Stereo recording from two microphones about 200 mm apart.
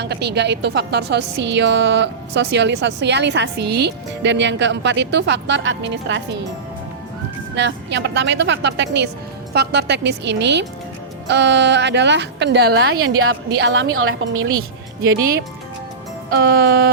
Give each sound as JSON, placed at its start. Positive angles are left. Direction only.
{"t": 0.0, "sound": "a woman's voice", "side_deg": -55}
{"t": 7.5, "sound": "a woman's voice", "side_deg": -60}
{"t": 13.0, "sound": "a woman's voice", "side_deg": -90}
{"t": 13.5, "sound": "a woman's voice", "side_deg": -60}
{"t": 13.9, "sound": "a woman's voice", "side_deg": -90}
{"t": 16.3, "sound": "music", "side_deg": -55}